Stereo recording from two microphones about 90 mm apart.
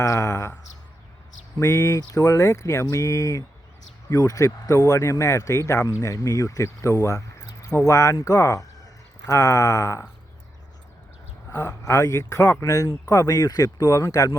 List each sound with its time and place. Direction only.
0.0 s a sound: 35° left (ahead or behind)
1.6 s speech: 40° left (ahead or behind)
11.5 s speech: 40° left (ahead or behind)